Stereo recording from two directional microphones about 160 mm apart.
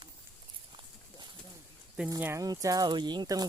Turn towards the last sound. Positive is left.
turn(degrees=-25)  # may be behind; listen again after turning